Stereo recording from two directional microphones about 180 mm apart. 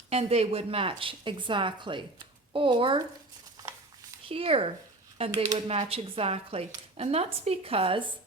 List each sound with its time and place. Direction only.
0.1 s a woman's voice: 35° right (ahead or behind)
4.3 s speech: 30° right (ahead or behind)